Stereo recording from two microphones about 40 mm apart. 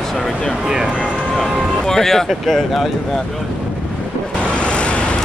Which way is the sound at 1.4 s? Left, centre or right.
Centre.